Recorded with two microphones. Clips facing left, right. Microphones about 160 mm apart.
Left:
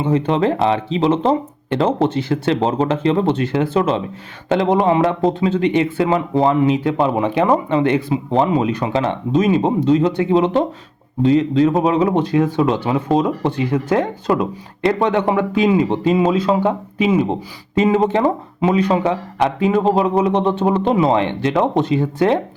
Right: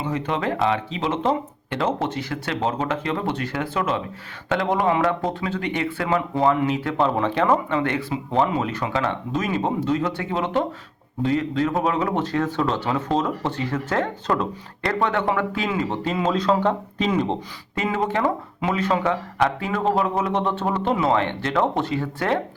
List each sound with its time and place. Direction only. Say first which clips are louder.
0.0 s speech: left 8 dB; 30° left (ahead or behind); by 17.3 s 5° left (ahead or behind)
17.7 s speech: left 8 dB; 20° left (ahead or behind)